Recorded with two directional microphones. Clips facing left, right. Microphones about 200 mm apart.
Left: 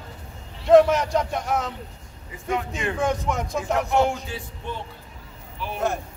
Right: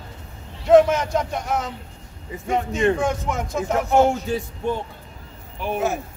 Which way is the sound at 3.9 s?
40° right (ahead or behind).